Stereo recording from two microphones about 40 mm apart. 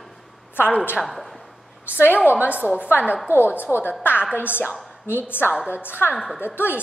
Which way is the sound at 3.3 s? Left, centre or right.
Left.